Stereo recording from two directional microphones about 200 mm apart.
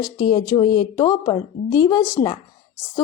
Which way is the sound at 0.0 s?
20° left (ahead or behind).